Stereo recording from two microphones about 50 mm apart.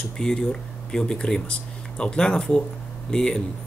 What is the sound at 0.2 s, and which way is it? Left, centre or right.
A man's voice, centre.